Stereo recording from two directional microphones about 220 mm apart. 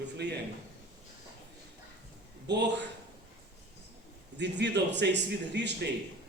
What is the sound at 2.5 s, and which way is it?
Speech, 50° right (ahead or behind).